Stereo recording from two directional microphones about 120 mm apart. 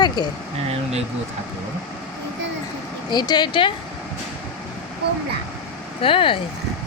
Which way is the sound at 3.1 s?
35° left (ahead or behind).